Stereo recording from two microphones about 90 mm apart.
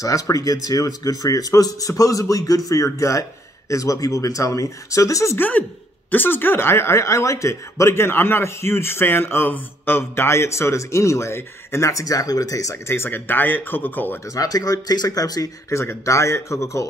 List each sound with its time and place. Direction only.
0.0 s speech: 40° left (ahead or behind)
5.4 s speech: 20° left (ahead or behind)
14.3 s speech: 45° left (ahead or behind)
15.7 s speech: 30° left (ahead or behind)